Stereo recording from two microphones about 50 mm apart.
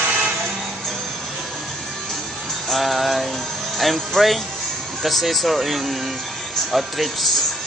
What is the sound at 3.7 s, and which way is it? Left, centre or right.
Speech, centre.